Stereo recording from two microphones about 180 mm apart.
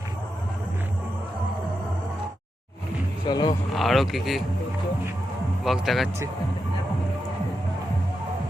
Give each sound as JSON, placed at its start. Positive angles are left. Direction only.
{"t": 3.2, "sound": "speech", "side_deg": 25}
{"t": 3.8, "sound": "speech", "side_deg": 0}
{"t": 5.6, "sound": "speech", "side_deg": 0}